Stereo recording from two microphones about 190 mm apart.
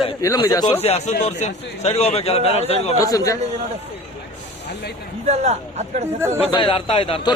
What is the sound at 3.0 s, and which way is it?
Speech, 20° left (ahead or behind).